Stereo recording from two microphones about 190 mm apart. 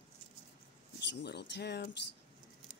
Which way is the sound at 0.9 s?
65° left (ahead or behind).